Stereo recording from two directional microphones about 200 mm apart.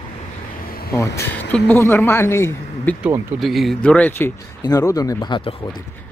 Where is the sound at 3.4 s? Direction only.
Centre (ahead or behind); by 5.5 s 20° left (ahead or behind).